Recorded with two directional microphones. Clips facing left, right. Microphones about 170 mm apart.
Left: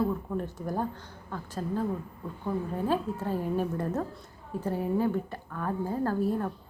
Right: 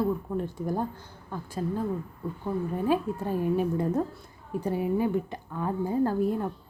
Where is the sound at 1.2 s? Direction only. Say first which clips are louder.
Right 2 dB; 10° right (ahead or behind).